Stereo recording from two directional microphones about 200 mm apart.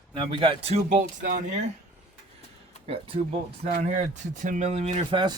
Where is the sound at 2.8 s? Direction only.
30° right (ahead or behind).